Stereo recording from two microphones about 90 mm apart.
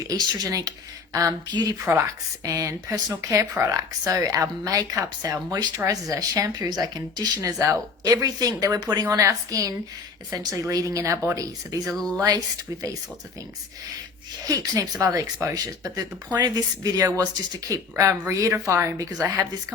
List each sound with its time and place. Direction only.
0.1 s speech: 40° right (ahead or behind)
14.4 s speech: 40° right (ahead or behind)